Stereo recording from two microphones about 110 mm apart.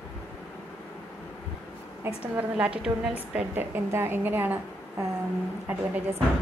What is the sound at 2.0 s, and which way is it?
A woman's voice, 15° right (ahead or behind).